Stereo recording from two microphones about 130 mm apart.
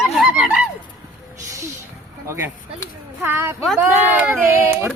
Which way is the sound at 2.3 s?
15° right (ahead or behind).